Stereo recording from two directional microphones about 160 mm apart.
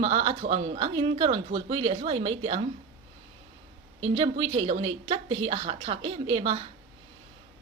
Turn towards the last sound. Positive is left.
turn(degrees=-35)  # may be behind; listen again after turning